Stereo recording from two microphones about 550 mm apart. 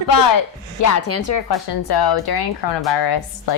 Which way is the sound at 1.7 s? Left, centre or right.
Left.